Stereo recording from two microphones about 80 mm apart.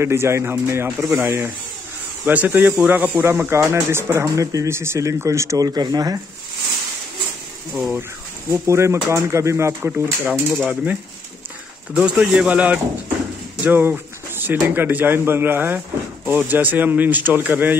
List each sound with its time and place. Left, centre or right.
0.0 s speech: right
8.5 s speech: right
9.8 s speech: right
13.7 s a sound: right
14.6 s speech: right